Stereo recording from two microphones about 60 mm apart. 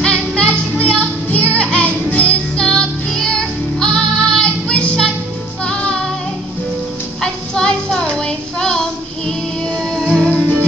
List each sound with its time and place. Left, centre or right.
0.0 s music: centre
7.2 s child singing: centre
9.7 s music: centre